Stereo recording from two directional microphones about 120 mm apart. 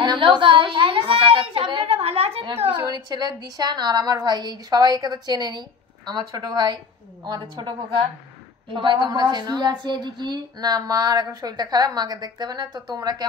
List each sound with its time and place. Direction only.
0.0 s a sound: 40° right (ahead or behind); by 2.4 s 60° right (ahead or behind)
2.7 s a woman's voice: 35° right (ahead or behind)
8.7 s a woman's voice: 40° right (ahead or behind)